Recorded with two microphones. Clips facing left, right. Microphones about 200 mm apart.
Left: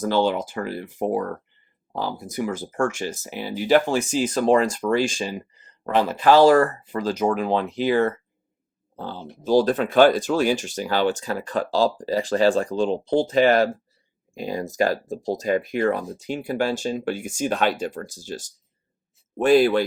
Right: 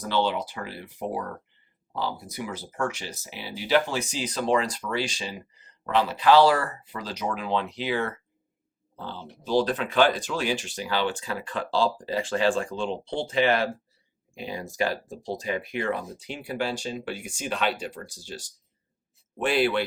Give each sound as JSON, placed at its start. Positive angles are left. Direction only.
{"t": 0.0, "sound": "speech", "side_deg": 45}